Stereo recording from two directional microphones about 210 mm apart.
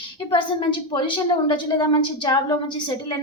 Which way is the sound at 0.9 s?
20° left (ahead or behind).